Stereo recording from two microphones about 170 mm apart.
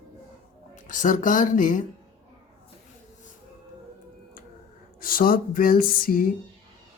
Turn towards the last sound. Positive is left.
turn(degrees=55)  # may be behind; listen again after turning